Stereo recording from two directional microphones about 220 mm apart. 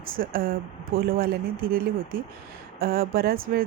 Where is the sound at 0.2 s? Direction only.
40° right (ahead or behind).